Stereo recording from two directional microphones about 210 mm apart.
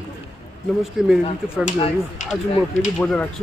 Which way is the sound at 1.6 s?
30° left (ahead or behind).